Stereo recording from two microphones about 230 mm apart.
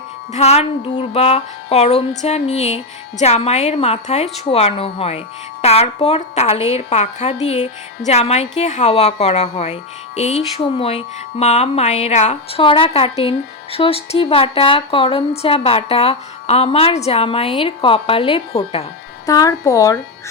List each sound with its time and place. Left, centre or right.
0.3 s a woman's voice: left
19.2 s speech: centre